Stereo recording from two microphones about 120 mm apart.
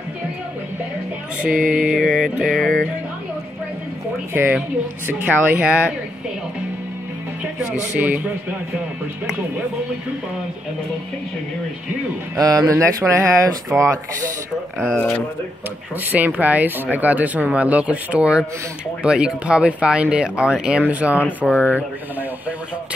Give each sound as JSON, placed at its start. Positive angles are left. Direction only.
{"t": 1.4, "sound": "music", "side_deg": -5}
{"t": 4.3, "sound": "speech", "side_deg": -15}
{"t": 12.4, "sound": "speech", "side_deg": -30}
{"t": 16.1, "sound": "speech", "side_deg": -15}